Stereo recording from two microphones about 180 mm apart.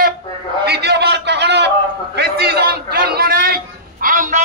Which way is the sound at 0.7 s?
65° right (ahead or behind).